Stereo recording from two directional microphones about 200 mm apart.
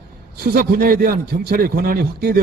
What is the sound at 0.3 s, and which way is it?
A man's voice, 50° right (ahead or behind).